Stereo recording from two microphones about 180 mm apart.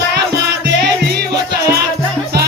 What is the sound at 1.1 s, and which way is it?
Music, 65° right (ahead or behind).